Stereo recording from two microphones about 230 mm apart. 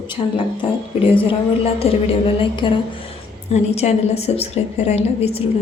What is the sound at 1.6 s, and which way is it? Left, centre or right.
A woman's voice, left.